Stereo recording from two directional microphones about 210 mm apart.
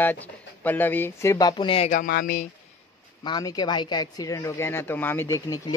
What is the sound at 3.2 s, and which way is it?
Speech, 20° left (ahead or behind).